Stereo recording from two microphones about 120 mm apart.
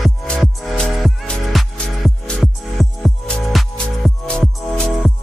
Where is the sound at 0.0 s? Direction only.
Centre (ahead or behind).